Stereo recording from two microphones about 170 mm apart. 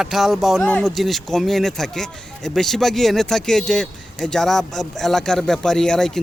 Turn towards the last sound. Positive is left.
turn(degrees=5)  # may be behind; listen again after turning